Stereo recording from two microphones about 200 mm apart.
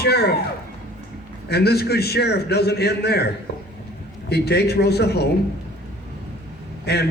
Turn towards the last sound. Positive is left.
turn(degrees=55)  # may be behind; listen again after turning